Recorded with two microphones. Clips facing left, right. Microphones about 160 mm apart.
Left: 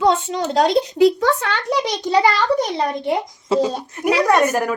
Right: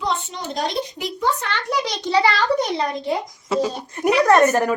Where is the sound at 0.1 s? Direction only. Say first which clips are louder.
Left 7 dB; 90° left.